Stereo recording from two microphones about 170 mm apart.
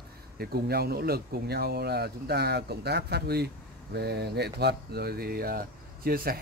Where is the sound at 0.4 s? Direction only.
65° right (ahead or behind).